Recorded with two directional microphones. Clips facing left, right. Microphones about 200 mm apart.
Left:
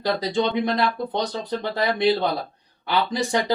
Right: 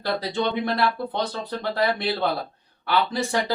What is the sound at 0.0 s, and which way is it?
Speech, 15° left (ahead or behind).